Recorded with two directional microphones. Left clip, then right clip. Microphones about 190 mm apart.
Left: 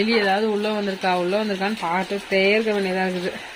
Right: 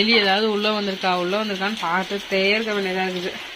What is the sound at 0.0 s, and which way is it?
Speech, 10° left (ahead or behind).